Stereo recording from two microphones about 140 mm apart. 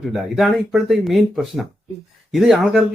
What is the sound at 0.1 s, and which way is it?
Speech, centre (ahead or behind).